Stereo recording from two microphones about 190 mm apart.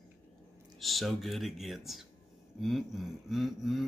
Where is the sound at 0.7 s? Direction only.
Centre (ahead or behind).